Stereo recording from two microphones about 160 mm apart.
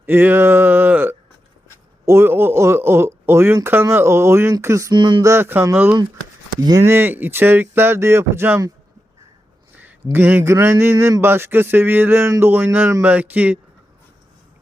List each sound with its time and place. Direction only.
0.0 s a sound: 10° right (ahead or behind)
2.0 s speech: 15° right (ahead or behind)
5.3 s speech: 15° right (ahead or behind)
9.7 s speech: 15° right (ahead or behind)